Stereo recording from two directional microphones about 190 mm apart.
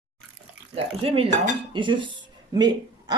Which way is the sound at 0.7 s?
30° right (ahead or behind).